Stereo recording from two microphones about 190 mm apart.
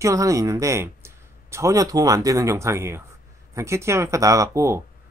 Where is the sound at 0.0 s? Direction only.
15° right (ahead or behind).